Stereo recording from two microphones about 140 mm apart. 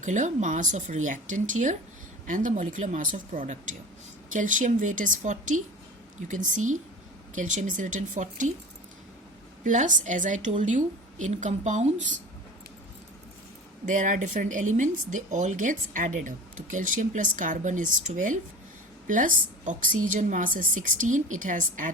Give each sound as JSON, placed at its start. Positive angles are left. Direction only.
{"t": 0.0, "sound": "a woman's voice", "side_deg": -60}
{"t": 9.6, "sound": "a woman's voice", "side_deg": -65}
{"t": 13.8, "sound": "speech", "side_deg": -65}